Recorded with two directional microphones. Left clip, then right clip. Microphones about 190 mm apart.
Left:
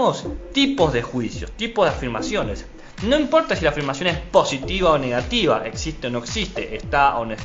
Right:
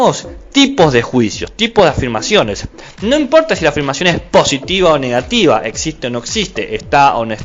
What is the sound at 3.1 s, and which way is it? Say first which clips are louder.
Speech: right 7 dB; 35° right (ahead or behind).